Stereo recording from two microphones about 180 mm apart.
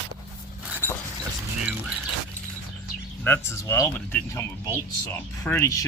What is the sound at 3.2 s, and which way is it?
Speech, 15° left (ahead or behind).